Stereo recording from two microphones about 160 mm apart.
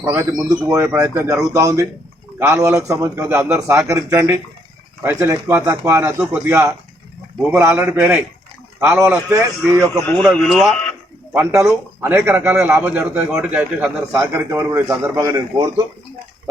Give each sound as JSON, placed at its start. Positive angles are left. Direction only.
{"t": 0.0, "sound": "a man's voice", "side_deg": -20}
{"t": 10.0, "sound": "speech", "side_deg": 10}
{"t": 11.3, "sound": "a man's voice", "side_deg": -15}